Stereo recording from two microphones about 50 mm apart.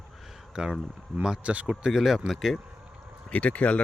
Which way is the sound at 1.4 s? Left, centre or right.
Right.